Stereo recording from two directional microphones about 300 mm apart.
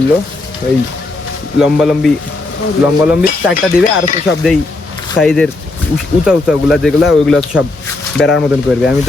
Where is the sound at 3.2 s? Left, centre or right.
Centre.